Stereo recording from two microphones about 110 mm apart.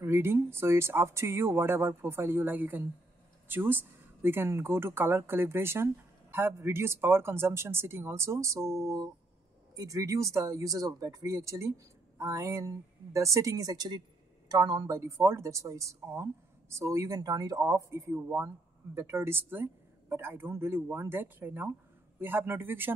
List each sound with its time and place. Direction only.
0.0 s a woman's voice: 20° right (ahead or behind)
15.0 s speech: 25° right (ahead or behind)